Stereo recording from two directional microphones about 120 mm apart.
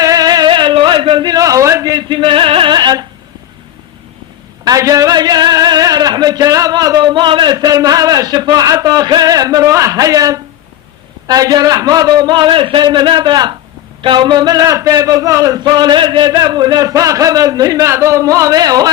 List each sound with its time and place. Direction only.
0.0 s a sound: 30° right (ahead or behind)
2.0 s music: 45° right (ahead or behind)
4.6 s speech: 30° right (ahead or behind)